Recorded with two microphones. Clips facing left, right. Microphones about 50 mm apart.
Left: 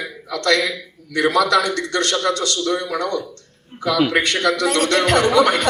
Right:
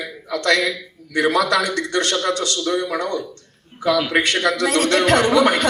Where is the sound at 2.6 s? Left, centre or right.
Centre.